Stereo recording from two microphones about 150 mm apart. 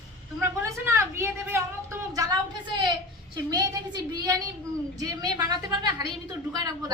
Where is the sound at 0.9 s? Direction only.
15° right (ahead or behind).